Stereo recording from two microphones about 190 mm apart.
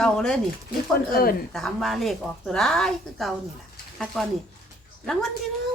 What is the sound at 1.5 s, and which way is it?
A woman's voice, centre (ahead or behind).